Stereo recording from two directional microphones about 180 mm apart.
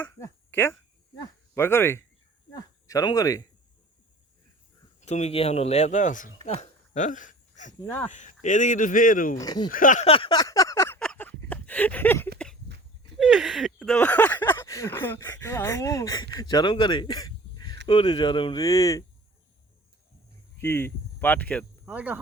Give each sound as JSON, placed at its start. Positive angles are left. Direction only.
{"t": 0.0, "sound": "speech", "side_deg": 15}
{"t": 2.5, "sound": "a sound", "side_deg": 20}
{"t": 4.9, "sound": "speech", "side_deg": 40}
{"t": 6.4, "sound": "a sound", "side_deg": 40}
{"t": 7.7, "sound": "speech", "side_deg": 15}
{"t": 8.1, "sound": "speech", "side_deg": 45}
{"t": 9.4, "sound": "speech", "side_deg": 20}
{"t": 9.6, "sound": "speech", "side_deg": 50}
{"t": 10.1, "sound": "a sound", "side_deg": 30}
{"t": 13.1, "sound": "speech", "side_deg": -5}
{"t": 20.6, "sound": "speech", "side_deg": 15}
{"t": 21.8, "sound": "speech", "side_deg": -10}